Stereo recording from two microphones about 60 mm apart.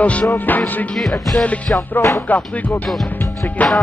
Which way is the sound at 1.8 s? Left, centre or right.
Left.